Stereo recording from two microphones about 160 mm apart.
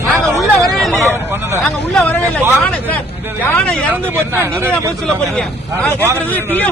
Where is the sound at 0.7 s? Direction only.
Centre (ahead or behind).